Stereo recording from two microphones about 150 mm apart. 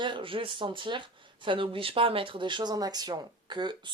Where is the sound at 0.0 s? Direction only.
35° right (ahead or behind).